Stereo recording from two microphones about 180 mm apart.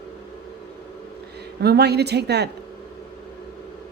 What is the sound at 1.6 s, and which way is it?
Speech, 65° right (ahead or behind).